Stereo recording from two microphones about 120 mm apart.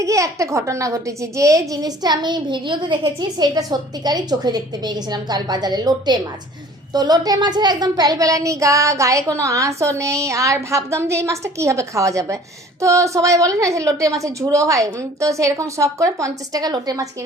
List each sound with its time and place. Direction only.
0.0 s a woman's voice: 25° right (ahead or behind)